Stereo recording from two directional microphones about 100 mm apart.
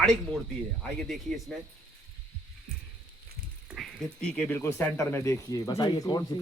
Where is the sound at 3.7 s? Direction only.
Centre (ahead or behind).